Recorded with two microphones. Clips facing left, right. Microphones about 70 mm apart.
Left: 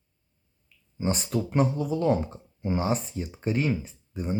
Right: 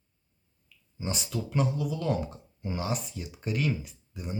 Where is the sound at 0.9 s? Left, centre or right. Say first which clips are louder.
Left 6 dB; left.